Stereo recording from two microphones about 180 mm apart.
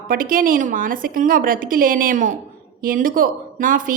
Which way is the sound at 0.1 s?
50° right (ahead or behind).